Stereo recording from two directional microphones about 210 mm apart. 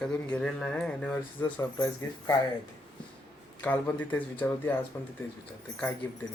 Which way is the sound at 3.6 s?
5° left (ahead or behind).